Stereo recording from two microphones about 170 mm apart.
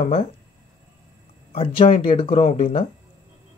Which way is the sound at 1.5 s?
35° left (ahead or behind).